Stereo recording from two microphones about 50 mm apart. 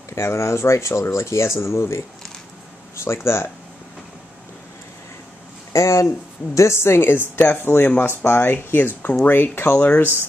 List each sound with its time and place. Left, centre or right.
0.1 s speech: left
1.6 s speech: left
3.0 s speech: left
5.7 s speech: left
6.5 s speech: left